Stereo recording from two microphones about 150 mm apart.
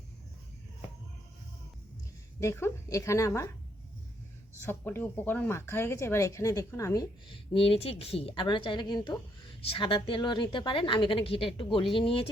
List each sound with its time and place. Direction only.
2.4 s a woman's voice: 15° left (ahead or behind)
4.6 s speech: 15° left (ahead or behind)
7.5 s a woman's voice: 40° left (ahead or behind)